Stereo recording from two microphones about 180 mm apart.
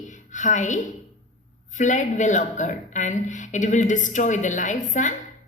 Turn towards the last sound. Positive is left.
turn(degrees=45)  # may be behind; listen again after turning